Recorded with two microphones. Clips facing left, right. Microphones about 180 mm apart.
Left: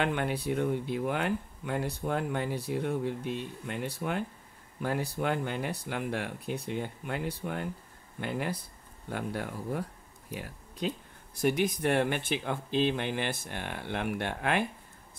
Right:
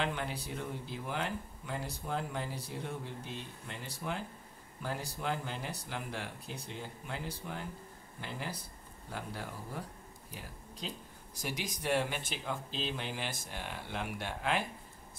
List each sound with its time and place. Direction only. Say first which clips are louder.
0.0 s speech: left 7 dB; 60° left (ahead or behind)